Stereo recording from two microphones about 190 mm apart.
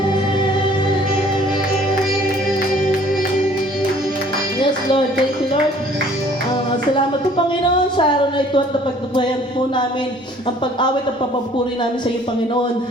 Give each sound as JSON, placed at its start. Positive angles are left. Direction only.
{"t": 7.9, "sound": "speech", "side_deg": 25}